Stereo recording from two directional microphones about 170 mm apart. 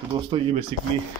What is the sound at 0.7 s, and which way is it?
Speech, 35° right (ahead or behind).